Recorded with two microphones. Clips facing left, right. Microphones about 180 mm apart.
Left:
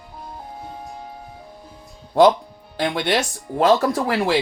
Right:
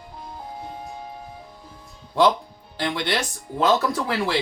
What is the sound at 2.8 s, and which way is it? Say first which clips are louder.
Speech: left 4 dB; 45° left (ahead or behind).